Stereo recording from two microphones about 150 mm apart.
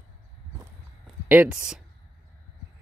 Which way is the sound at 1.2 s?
10° right (ahead or behind).